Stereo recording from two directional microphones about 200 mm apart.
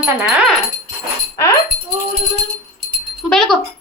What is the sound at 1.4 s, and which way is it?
Speech, 15° left (ahead or behind).